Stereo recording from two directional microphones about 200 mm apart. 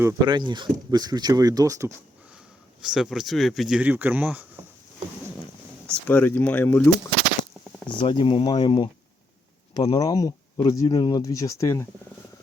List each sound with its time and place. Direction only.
0.0 s speech: 15° right (ahead or behind)
2.8 s speech: centre (ahead or behind)
5.9 s speech: 10° left (ahead or behind)
8.0 s speech: 25° left (ahead or behind)